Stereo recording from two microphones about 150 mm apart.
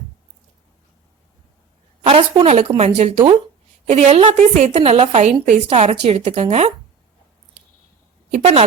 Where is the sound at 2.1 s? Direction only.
40° right (ahead or behind).